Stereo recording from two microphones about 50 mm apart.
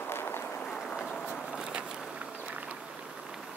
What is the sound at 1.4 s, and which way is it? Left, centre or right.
Vehicle, centre.